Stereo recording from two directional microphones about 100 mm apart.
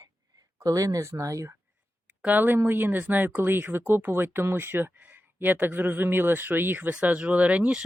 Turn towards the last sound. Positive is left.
turn(degrees=-15)  # may be behind; listen again after turning